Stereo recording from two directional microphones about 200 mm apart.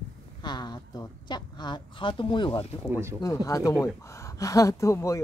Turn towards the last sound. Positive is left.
turn(degrees=15)  # may be behind; listen again after turning